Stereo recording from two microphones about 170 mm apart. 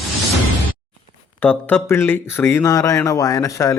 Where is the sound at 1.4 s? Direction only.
10° left (ahead or behind).